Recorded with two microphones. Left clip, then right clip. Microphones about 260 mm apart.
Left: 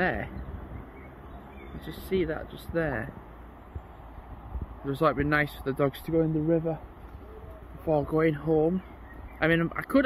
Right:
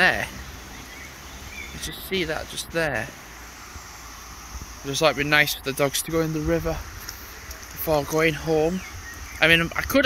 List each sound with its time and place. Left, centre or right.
0.0 s speech: centre
1.8 s speech: centre
4.8 s speech: centre
6.1 s speech: centre
7.9 s speech: centre